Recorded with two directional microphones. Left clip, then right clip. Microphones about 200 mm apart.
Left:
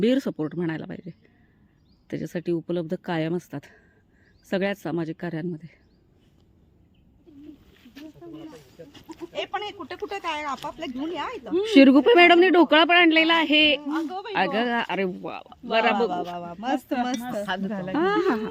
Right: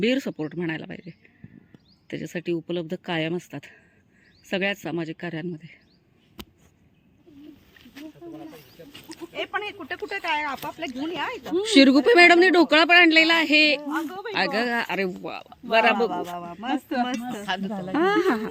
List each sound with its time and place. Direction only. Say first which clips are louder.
0.0 s a man's voice: left 1 dB; 20° left (ahead or behind)
8.8 s sheep: left 3 dB; 50° left (ahead or behind)
9.3 s speech: right 1 dB; 60° left (ahead or behind)
11.6 s speech: left 1 dB; 15° left (ahead or behind)
13.9 s speech: even; 40° left (ahead or behind)
14.3 s speech: even; 15° left (ahead or behind)
16.0 s speech: even; 55° left (ahead or behind)
17.4 s speech: right 3 dB; 40° left (ahead or behind)
17.7 s speech: right 2 dB; centre (ahead or behind)